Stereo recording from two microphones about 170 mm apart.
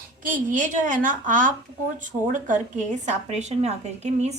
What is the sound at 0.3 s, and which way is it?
A woman's voice, 50° right (ahead or behind).